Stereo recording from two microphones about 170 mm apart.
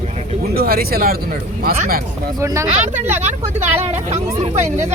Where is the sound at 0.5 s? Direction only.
65° right (ahead or behind).